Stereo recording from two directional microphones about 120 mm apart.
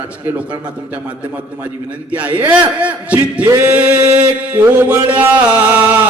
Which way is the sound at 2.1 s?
10° right (ahead or behind).